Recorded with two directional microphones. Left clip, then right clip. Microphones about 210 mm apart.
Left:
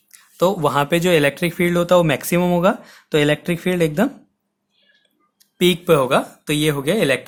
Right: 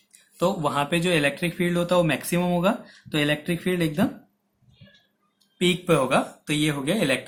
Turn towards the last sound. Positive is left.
turn(degrees=50)  # may be behind; listen again after turning